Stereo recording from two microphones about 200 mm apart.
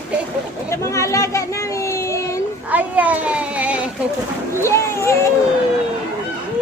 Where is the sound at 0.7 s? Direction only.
15° left (ahead or behind).